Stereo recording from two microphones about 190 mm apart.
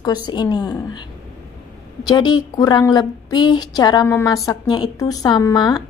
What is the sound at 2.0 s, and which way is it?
A woman's voice, 25° left (ahead or behind).